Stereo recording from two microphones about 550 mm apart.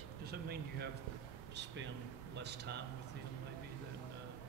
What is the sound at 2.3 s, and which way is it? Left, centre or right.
Speech, centre.